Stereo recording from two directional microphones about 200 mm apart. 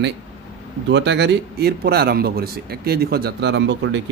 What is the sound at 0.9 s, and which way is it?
Speech, 60° right (ahead or behind).